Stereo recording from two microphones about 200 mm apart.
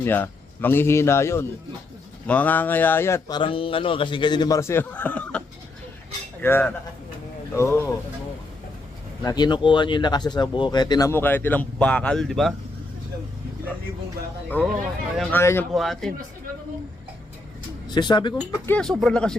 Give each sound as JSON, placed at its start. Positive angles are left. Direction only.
{"t": 0.0, "sound": "speech", "side_deg": 10}
{"t": 6.4, "sound": "speech", "side_deg": 10}
{"t": 9.2, "sound": "speech", "side_deg": 20}
{"t": 14.5, "sound": "speech", "side_deg": 10}
{"t": 15.7, "sound": "speech", "side_deg": 0}
{"t": 17.8, "sound": "speech", "side_deg": 20}
{"t": 18.6, "sound": "speech", "side_deg": 5}